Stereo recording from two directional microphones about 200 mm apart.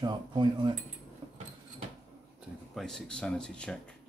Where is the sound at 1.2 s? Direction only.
25° right (ahead or behind).